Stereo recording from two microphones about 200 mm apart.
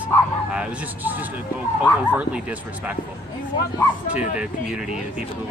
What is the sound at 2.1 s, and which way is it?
Speech, 5° right (ahead or behind).